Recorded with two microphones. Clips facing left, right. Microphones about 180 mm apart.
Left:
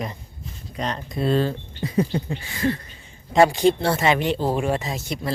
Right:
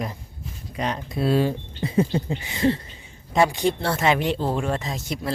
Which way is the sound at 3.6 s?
25° left (ahead or behind).